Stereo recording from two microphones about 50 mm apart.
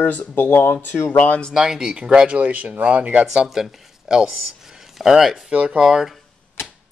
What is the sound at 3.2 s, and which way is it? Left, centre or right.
Speech, centre.